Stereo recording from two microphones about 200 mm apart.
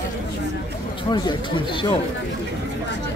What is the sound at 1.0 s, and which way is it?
Speech, 20° left (ahead or behind).